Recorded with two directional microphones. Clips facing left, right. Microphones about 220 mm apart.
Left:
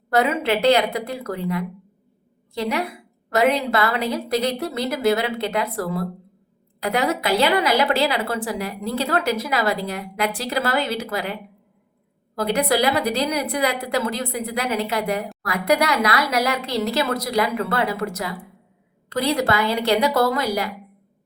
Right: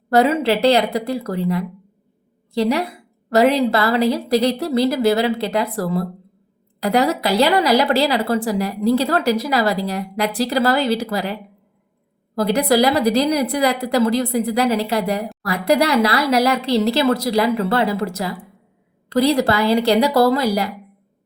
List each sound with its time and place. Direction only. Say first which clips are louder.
0.1 s a woman's voice: right 4 dB; 35° right (ahead or behind)
12.4 s a woman's voice: right 4 dB; 35° right (ahead or behind)